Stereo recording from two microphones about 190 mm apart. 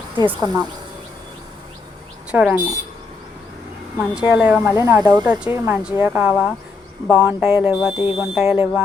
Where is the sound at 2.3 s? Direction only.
5° right (ahead or behind).